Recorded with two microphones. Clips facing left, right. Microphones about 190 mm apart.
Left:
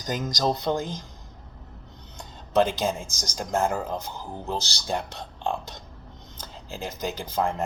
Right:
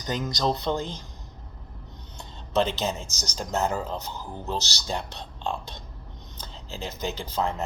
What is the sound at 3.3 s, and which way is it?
Speech, 50° left (ahead or behind).